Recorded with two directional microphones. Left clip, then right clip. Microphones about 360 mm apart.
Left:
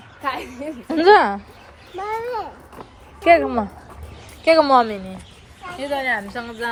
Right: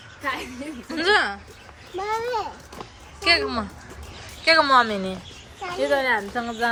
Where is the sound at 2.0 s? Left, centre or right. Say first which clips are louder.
Even; centre.